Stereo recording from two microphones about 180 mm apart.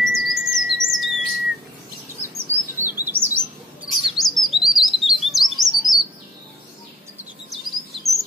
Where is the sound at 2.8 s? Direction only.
10° right (ahead or behind).